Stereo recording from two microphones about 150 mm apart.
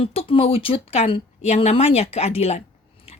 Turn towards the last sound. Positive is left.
turn(degrees=40)  # may be behind; listen again after turning